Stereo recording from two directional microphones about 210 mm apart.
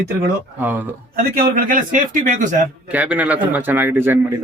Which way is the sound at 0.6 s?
10° right (ahead or behind).